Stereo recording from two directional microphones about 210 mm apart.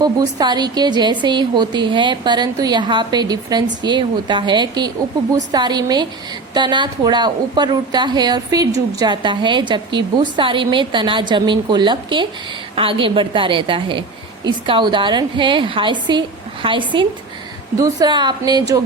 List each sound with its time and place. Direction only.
0.0 s a woman's voice: 20° right (ahead or behind)